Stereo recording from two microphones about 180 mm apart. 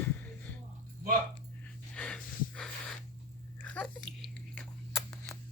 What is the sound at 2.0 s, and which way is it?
Snort, 5° left (ahead or behind).